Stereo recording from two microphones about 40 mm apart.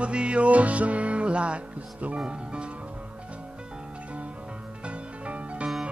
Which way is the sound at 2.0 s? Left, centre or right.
Right.